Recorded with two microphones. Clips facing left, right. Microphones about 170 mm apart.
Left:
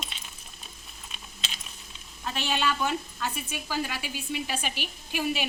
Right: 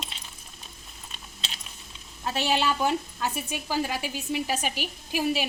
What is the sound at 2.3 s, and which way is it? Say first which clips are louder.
Speech: right 3 dB; 40° right (ahead or behind).